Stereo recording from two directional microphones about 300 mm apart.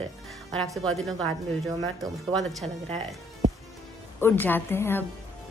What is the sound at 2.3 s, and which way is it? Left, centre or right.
Speech, centre.